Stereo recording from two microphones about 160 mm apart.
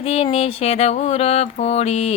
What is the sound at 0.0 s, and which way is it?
Speech, 40° left (ahead or behind).